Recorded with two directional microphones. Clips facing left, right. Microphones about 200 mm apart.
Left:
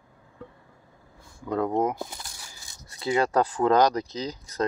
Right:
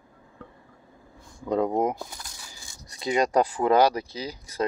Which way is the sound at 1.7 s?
15° right (ahead or behind).